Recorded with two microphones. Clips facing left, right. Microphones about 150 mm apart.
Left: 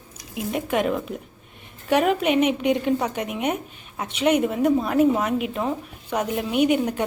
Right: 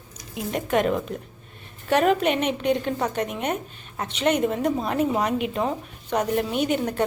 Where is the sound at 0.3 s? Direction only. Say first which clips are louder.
Even; 5° left (ahead or behind).